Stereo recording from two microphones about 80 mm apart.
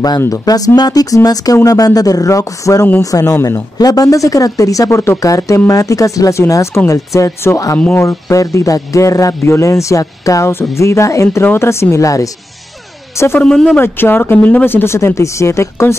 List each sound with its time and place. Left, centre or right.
0.3 s speech: left
13.4 s speech: centre
13.7 s speech: left